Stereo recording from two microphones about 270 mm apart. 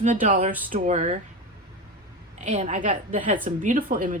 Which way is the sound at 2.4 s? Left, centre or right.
Right.